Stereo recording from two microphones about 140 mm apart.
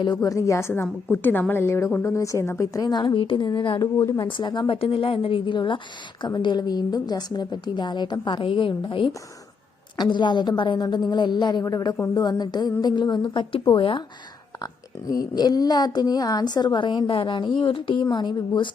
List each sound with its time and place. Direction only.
0.0 s a woman's voice: 25° left (ahead or behind)
3.8 s a woman's voice: 25° left (ahead or behind)
14.6 s a woman's voice: 25° left (ahead or behind)